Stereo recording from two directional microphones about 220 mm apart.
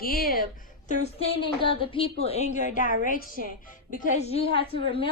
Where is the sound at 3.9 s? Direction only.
30° left (ahead or behind).